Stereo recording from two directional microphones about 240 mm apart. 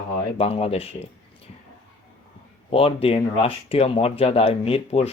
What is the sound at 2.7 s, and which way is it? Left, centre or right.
Speech, left.